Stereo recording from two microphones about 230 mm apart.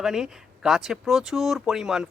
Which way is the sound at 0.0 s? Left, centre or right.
Centre.